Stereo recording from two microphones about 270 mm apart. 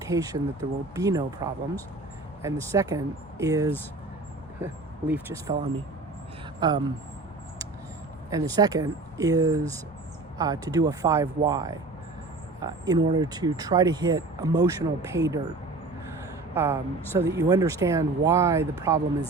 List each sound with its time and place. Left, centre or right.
0.0 s speech: centre
8.3 s speech: centre
16.6 s speech: centre